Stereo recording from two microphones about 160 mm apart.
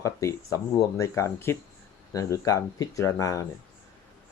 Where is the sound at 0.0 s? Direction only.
20° left (ahead or behind).